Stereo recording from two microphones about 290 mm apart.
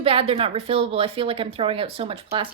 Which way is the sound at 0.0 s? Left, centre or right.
Centre.